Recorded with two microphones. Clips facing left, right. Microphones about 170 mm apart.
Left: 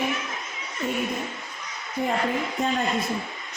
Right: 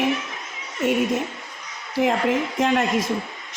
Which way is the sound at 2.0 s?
90° right.